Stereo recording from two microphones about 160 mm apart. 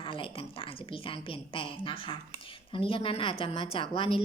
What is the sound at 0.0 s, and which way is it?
A woman's voice, 35° left (ahead or behind).